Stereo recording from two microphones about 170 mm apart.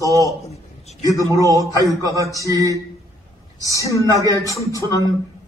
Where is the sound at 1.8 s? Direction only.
20° right (ahead or behind).